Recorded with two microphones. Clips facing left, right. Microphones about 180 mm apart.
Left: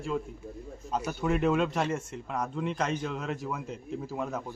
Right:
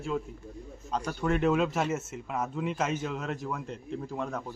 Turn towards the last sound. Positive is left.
turn(degrees=5)  # may be behind; listen again after turning